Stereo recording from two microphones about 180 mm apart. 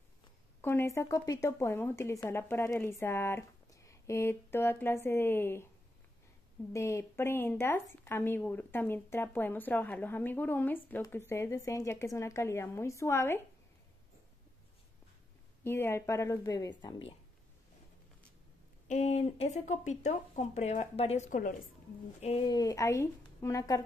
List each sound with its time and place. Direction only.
0.6 s speech: 15° left (ahead or behind)
6.7 s speech: 15° left (ahead or behind)
15.6 s speech: 15° left (ahead or behind)
18.9 s speech: 40° left (ahead or behind)
22.5 s speech: 20° left (ahead or behind)